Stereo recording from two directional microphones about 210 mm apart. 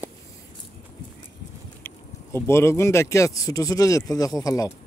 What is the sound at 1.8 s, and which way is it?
Speech, 10° left (ahead or behind).